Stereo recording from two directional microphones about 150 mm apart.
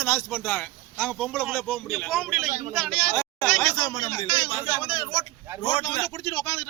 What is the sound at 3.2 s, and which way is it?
A man's voice, 15° left (ahead or behind).